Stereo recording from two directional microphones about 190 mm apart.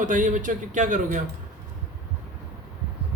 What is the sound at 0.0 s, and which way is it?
A man's voice, 45° right (ahead or behind).